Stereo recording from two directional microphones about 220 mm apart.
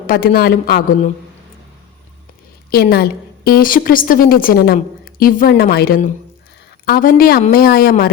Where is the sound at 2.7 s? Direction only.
45° left (ahead or behind).